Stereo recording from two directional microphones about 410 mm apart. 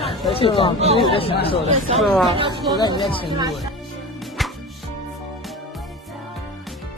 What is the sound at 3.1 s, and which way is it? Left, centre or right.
Speech, centre.